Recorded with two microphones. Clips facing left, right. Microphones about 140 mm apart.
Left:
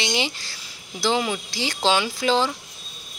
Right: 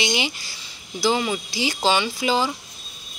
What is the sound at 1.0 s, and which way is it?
Speech, centre (ahead or behind).